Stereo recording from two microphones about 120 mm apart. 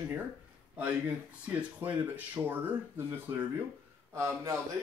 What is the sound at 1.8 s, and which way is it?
Speech, 15° right (ahead or behind).